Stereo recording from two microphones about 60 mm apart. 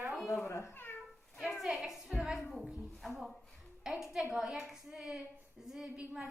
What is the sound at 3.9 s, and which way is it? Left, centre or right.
A woman's voice, centre.